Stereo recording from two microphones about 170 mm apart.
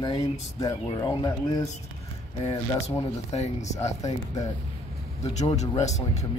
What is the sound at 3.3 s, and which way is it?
Speech, 40° left (ahead or behind).